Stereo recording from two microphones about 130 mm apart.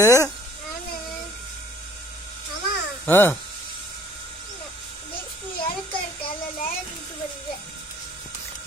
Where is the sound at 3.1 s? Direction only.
15° left (ahead or behind).